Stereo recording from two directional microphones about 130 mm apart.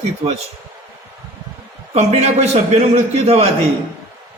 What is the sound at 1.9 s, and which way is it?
A man's voice, 60° right (ahead or behind).